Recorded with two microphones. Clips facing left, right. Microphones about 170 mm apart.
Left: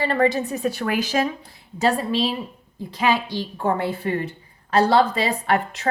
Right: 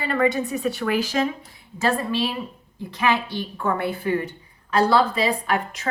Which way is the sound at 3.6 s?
25° left (ahead or behind).